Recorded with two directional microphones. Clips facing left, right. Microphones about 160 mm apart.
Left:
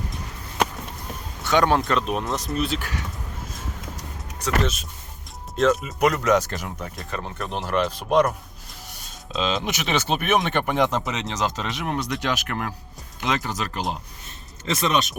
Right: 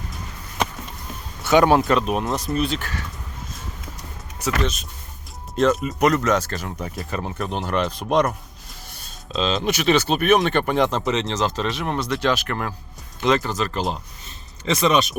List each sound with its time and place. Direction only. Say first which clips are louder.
1.5 s speech: right 4 dB; 10° right (ahead or behind); by 3.0 s 10° left (ahead or behind)
4.4 s speech: even; 5° right (ahead or behind); by 6.7 s 15° left (ahead or behind)
6.8 s speech: right 4 dB; 5° right (ahead or behind)
8.9 s speech: right 1 dB; 15° left (ahead or behind)
14.6 s speech: right 4 dB; centre (ahead or behind)